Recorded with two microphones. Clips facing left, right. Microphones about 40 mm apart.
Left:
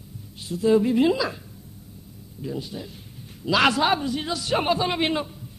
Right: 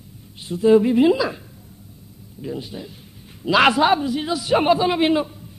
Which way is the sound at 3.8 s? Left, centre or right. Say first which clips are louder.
Right 4 dB; centre.